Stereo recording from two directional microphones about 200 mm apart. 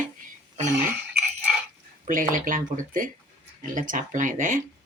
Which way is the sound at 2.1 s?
45° right (ahead or behind).